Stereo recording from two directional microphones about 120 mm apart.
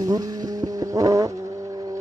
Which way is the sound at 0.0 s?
30° right (ahead or behind).